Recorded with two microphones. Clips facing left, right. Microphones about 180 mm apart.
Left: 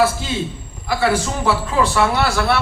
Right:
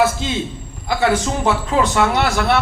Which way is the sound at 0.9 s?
20° right (ahead or behind).